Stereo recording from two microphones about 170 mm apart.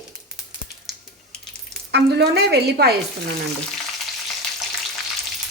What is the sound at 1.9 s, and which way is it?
Speech, 75° right (ahead or behind).